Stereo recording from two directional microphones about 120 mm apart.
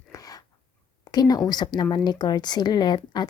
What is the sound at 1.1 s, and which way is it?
Speech, 35° left (ahead or behind).